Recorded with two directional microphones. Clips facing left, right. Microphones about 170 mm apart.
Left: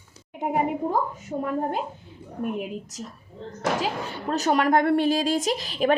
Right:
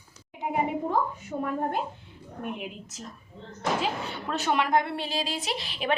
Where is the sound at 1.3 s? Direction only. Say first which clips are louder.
Left 3 dB; 30° left (ahead or behind).